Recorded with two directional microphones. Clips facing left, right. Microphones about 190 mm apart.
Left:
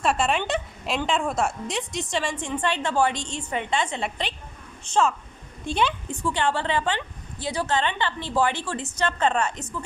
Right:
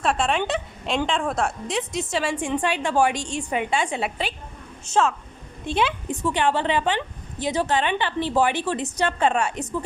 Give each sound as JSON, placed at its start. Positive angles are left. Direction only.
{"t": 0.0, "sound": "a woman's voice", "side_deg": 0}
{"t": 6.1, "sound": "a woman's voice", "side_deg": -15}